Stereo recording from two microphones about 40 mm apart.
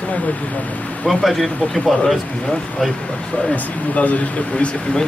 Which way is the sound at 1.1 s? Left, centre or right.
Centre.